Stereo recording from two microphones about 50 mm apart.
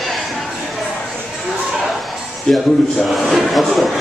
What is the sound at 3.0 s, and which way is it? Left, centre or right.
Speech, centre.